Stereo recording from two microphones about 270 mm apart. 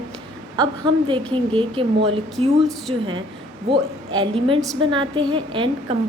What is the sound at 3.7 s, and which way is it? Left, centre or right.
A woman's voice, centre.